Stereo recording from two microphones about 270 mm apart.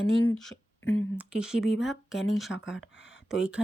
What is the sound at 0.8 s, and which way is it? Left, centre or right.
Speech, left.